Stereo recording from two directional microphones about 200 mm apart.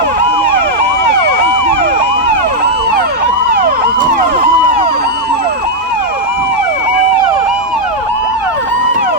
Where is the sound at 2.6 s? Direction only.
50° right (ahead or behind).